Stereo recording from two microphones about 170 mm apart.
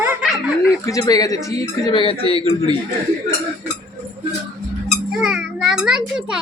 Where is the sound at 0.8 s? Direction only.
20° left (ahead or behind).